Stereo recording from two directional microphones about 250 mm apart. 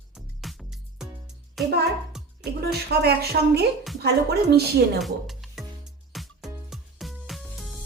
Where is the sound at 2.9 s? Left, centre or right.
Right.